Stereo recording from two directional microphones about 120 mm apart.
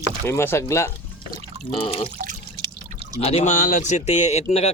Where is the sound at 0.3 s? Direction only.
20° left (ahead or behind).